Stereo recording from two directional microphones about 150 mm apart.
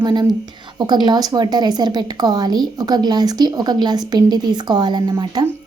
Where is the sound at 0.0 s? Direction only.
30° right (ahead or behind).